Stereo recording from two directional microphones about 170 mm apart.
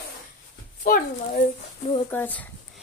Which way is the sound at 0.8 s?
60° left (ahead or behind).